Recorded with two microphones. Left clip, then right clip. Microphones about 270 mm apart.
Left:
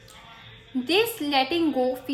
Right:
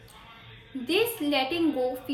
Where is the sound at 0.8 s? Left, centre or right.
Left.